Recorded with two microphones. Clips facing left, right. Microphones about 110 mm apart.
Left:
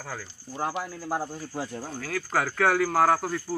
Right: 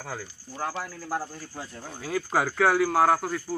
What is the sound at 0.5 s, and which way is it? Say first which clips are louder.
Speech: left 2 dB; 15° left (ahead or behind).